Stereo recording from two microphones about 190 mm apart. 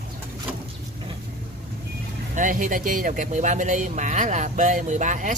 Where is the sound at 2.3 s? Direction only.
45° right (ahead or behind).